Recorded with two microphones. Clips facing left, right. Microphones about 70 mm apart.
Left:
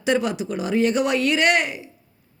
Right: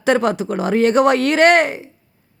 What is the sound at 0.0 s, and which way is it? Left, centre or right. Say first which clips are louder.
Speech: right 5 dB; right.